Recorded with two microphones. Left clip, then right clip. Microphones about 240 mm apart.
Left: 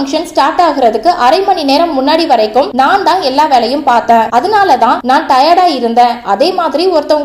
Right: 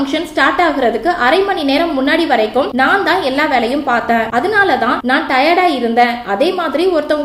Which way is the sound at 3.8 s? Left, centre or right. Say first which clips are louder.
Left 6 dB; left.